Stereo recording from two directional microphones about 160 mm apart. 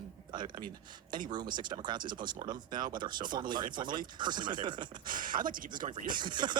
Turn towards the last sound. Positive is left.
turn(degrees=-30)  # may be behind; listen again after turning